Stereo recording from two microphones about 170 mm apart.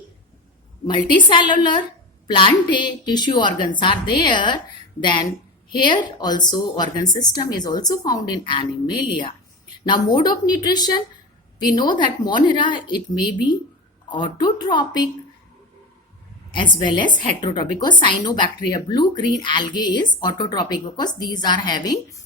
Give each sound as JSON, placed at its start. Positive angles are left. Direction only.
{"t": 0.9, "sound": "a woman's voice", "side_deg": 30}
{"t": 9.8, "sound": "a woman's voice", "side_deg": 25}
{"t": 14.1, "sound": "a woman's voice", "side_deg": 25}
{"t": 16.5, "sound": "a woman's voice", "side_deg": 25}